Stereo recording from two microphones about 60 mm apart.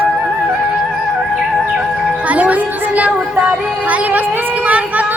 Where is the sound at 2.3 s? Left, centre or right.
Right.